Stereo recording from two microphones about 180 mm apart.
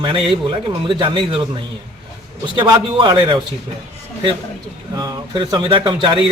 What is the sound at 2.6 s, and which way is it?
Speech, 25° right (ahead or behind).